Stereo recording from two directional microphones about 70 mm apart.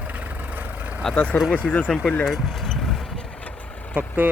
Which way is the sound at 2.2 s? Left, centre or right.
Centre.